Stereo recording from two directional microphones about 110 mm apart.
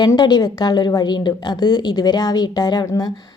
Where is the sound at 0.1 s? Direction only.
40° left (ahead or behind).